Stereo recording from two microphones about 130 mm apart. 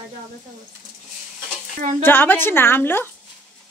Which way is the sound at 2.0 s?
15° left (ahead or behind).